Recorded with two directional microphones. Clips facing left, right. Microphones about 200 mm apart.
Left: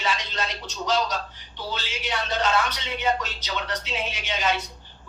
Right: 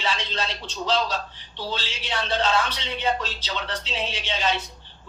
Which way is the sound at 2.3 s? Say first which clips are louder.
Right 1 dB; 30° right (ahead or behind).